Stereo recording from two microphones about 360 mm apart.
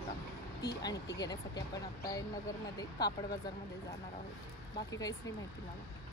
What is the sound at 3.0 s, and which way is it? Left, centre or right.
Speech, centre.